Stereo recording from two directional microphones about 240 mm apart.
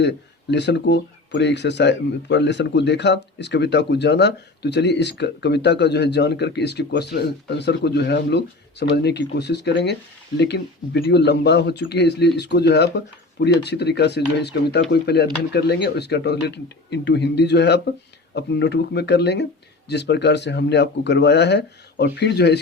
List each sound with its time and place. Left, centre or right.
0.0 s speech: left